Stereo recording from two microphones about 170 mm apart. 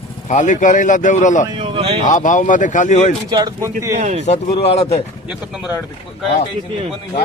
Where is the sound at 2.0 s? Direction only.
50° left (ahead or behind).